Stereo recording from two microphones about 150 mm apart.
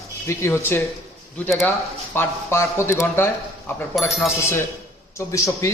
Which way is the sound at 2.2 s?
15° left (ahead or behind).